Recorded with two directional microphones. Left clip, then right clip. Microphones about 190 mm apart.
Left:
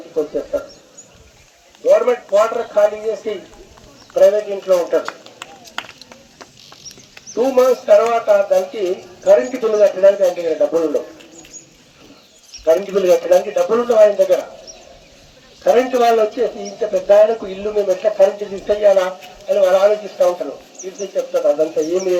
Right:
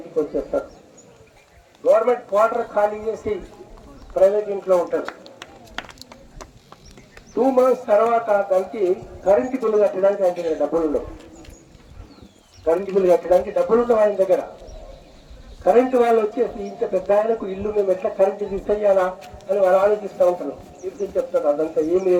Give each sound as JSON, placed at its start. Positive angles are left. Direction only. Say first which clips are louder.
{"t": 0.2, "sound": "speech", "louder": "left 2 dB", "side_deg": -50}
{"t": 1.8, "sound": "a sound", "louder": "left 3 dB", "side_deg": -50}
{"t": 4.1, "sound": "speech", "louder": "left 4 dB", "side_deg": -45}
{"t": 5.0, "sound": "run", "louder": "left 4 dB", "side_deg": 30}
{"t": 7.3, "sound": "speech", "louder": "left 3 dB", "side_deg": -50}
{"t": 13.0, "sound": "speech", "louder": "left 1 dB", "side_deg": -55}
{"t": 15.6, "sound": "speech", "louder": "left 3 dB", "side_deg": -50}